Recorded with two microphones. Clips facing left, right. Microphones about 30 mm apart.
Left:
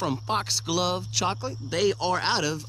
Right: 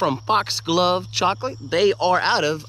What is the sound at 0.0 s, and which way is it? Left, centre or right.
Speech, right.